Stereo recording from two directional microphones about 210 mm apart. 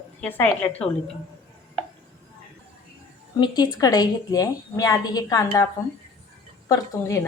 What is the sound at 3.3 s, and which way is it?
A woman's voice, 20° left (ahead or behind).